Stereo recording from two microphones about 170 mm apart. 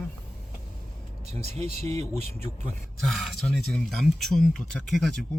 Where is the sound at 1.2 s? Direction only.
40° right (ahead or behind).